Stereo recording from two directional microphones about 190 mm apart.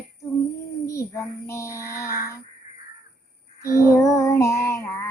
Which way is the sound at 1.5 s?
15° left (ahead or behind).